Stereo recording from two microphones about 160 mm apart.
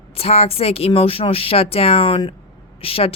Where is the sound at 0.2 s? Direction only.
40° left (ahead or behind).